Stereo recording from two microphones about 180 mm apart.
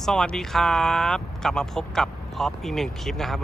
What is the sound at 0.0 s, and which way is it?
Speech, centre (ahead or behind).